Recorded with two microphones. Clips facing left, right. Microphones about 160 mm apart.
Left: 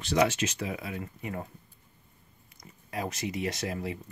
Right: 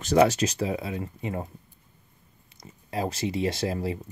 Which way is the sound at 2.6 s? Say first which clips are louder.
Right 5 dB; 30° right (ahead or behind).